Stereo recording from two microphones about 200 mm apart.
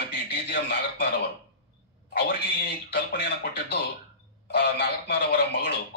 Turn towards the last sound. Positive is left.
turn(degrees=50)  # may be behind; listen again after turning